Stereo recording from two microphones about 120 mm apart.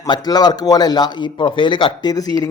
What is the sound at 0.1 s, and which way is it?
Speech, 35° left (ahead or behind).